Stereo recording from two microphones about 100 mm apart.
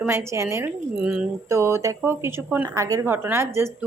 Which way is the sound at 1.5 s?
25° right (ahead or behind).